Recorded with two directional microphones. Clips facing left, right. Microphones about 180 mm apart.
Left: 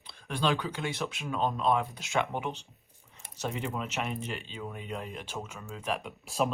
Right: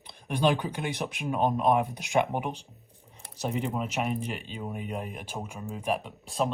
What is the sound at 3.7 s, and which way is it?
Speech, 10° right (ahead or behind).